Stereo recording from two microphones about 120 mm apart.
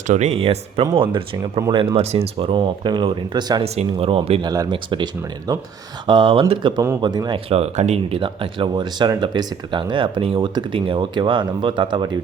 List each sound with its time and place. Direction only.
0.1 s speech: 65° right (ahead or behind)
0.9 s speech: 40° right (ahead or behind)
3.6 s speech: 55° right (ahead or behind)
4.4 s speech: 30° right (ahead or behind)
4.7 s speech: 40° right (ahead or behind)
6.1 s speech: 45° right (ahead or behind)
7.5 s speech: 60° right (ahead or behind); by 12.1 s 40° right (ahead or behind)